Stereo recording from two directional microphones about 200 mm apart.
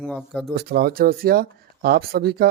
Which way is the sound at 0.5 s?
50° right (ahead or behind).